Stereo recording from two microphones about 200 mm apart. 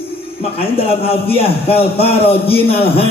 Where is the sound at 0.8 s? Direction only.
30° left (ahead or behind).